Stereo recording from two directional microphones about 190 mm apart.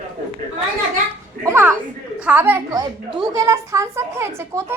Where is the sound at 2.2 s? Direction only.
10° right (ahead or behind).